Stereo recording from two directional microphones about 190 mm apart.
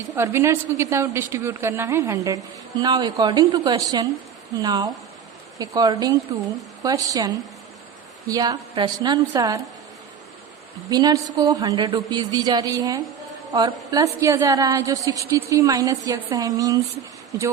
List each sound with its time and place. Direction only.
0.2 s a woman's voice: 15° right (ahead or behind)
10.8 s a woman's voice: 20° right (ahead or behind)